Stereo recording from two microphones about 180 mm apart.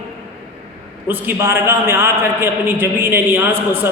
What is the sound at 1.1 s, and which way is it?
A man's voice, 10° right (ahead or behind).